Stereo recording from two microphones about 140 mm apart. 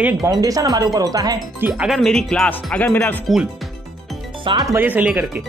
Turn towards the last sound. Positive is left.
turn(degrees=-10)  # may be behind; listen again after turning